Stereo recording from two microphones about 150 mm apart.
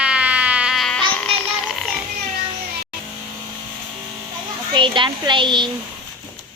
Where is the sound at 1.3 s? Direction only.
40° right (ahead or behind).